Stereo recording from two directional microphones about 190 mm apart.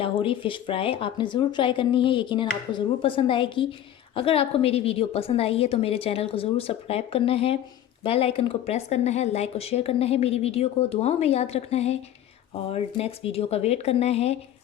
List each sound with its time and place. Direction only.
0.0 s a woman's voice: 30° left (ahead or behind)